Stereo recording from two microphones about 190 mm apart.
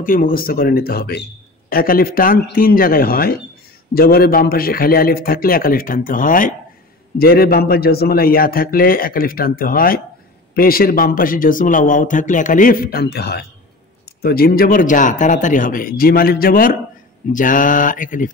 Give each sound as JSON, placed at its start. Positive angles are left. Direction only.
{"t": 0.0, "sound": "a man's voice", "side_deg": 45}